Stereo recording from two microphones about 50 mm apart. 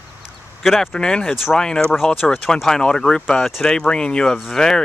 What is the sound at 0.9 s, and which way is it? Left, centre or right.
Speech, centre.